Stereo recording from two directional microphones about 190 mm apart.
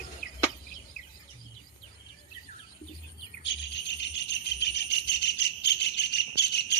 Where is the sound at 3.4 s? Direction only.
65° left (ahead or behind).